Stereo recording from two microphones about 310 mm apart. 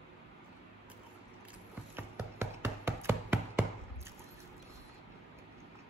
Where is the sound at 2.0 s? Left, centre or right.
Centre.